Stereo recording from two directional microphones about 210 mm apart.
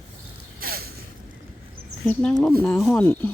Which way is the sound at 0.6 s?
45° right (ahead or behind).